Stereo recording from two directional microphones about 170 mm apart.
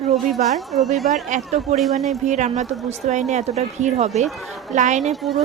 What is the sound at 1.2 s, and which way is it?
A woman's voice, 45° right (ahead or behind).